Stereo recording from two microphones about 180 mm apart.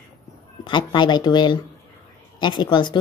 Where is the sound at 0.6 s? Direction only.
25° left (ahead or behind).